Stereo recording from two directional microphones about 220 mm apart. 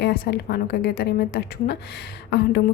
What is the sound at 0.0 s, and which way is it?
A woman's voice, 50° left (ahead or behind).